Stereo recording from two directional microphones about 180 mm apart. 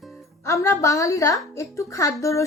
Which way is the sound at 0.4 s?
15° left (ahead or behind).